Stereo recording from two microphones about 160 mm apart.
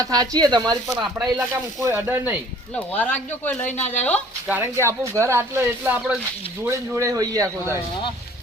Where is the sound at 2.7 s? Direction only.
10° left (ahead or behind).